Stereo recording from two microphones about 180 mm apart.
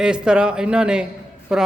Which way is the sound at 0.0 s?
5° right (ahead or behind).